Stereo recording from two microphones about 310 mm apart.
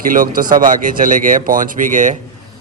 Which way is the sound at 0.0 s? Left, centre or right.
Right.